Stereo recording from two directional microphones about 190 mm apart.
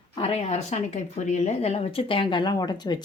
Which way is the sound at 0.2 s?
35° left (ahead or behind).